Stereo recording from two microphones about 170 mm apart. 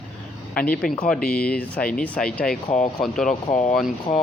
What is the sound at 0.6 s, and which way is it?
Speech, 60° left (ahead or behind).